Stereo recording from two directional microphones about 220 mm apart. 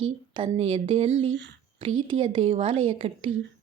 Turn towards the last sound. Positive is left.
turn(degrees=-25)  # may be behind; listen again after turning